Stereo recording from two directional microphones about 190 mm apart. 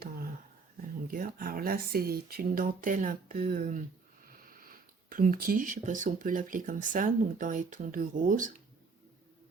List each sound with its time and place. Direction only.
0.8 s speech: 45° right (ahead or behind)